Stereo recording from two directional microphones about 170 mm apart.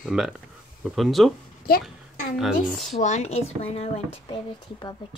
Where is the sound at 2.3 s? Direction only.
Centre (ahead or behind).